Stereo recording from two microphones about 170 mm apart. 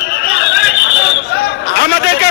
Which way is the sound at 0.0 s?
70° left (ahead or behind).